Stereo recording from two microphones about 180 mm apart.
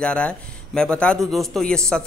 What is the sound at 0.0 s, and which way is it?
A man's voice, 5° left (ahead or behind).